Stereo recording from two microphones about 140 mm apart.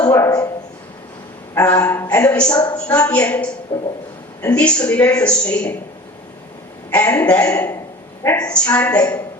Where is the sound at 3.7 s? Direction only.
40° left (ahead or behind).